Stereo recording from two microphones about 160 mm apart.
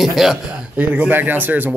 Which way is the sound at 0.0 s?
Centre (ahead or behind).